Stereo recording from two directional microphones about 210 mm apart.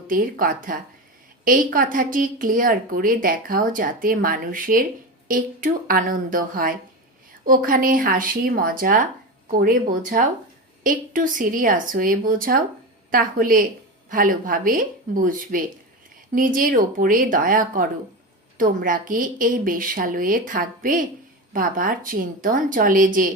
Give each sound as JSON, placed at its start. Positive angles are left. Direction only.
{"t": 0.1, "sound": "a woman's voice", "side_deg": -40}